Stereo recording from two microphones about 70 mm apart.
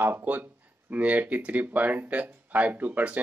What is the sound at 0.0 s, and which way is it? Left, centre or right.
Speech, right.